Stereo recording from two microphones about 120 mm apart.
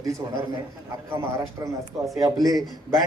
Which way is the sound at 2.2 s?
30° right (ahead or behind).